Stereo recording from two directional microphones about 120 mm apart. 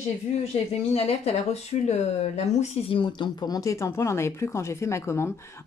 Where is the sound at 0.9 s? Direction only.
60° left (ahead or behind).